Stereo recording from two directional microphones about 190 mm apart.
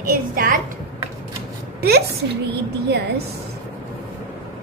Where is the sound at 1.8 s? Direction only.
60° right (ahead or behind).